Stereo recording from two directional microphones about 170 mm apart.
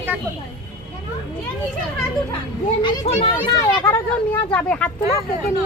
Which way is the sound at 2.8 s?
35° left (ahead or behind).